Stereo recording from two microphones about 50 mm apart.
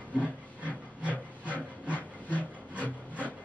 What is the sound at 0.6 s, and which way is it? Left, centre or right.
Hiss, right.